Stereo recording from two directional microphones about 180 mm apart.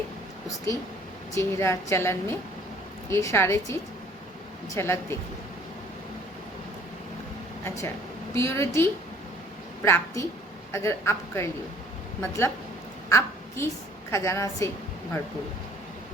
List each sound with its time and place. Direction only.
0.4 s a woman's voice: 20° left (ahead or behind)
8.3 s a woman's voice: 15° left (ahead or behind)
13.1 s a sound: 15° left (ahead or behind)
14.1 s a woman's voice: 15° left (ahead or behind)